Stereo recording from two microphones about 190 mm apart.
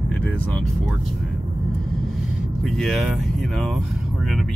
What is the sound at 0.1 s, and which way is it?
Speech, 5° left (ahead or behind).